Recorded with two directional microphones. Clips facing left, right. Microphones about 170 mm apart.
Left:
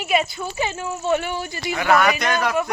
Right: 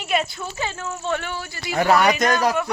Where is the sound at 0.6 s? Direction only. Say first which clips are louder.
Left 3 dB; 15° left (ahead or behind).